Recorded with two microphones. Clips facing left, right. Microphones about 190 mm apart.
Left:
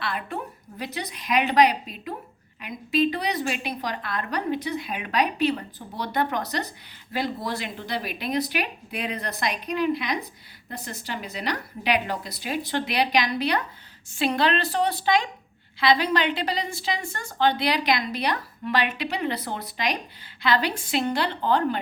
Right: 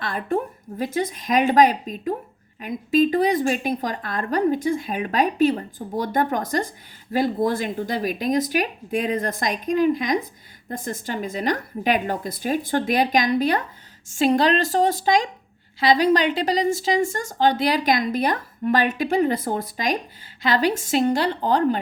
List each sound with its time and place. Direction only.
0.0 s a woman's voice: 45° right (ahead or behind)